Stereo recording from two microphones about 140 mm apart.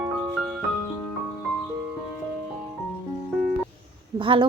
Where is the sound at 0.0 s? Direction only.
5° right (ahead or behind).